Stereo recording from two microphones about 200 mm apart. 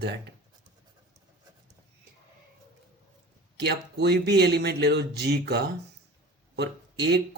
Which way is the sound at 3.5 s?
55° right (ahead or behind).